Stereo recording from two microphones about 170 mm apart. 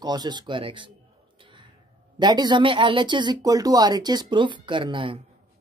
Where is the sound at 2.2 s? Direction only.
25° right (ahead or behind).